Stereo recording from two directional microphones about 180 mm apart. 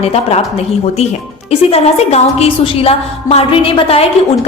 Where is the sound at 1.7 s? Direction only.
35° left (ahead or behind).